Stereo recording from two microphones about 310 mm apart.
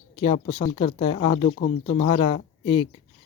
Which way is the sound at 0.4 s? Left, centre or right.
Centre.